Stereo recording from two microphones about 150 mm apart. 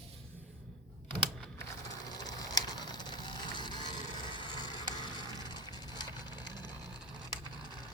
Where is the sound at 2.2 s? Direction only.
25° left (ahead or behind).